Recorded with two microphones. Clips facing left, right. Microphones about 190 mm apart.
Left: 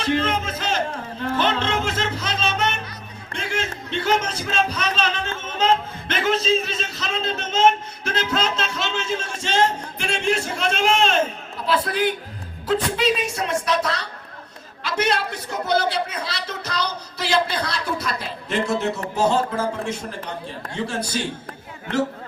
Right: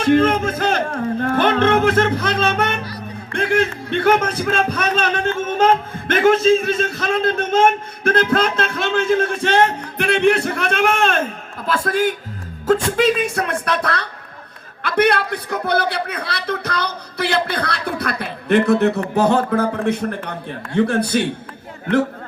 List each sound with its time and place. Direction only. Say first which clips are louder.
0.0 s a man's voice: right 8 dB; 50° right (ahead or behind)